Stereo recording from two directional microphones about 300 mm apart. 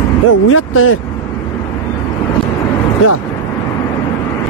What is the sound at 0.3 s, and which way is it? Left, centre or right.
Speech, left.